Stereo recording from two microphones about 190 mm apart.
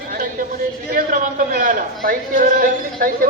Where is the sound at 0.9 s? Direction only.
45° right (ahead or behind).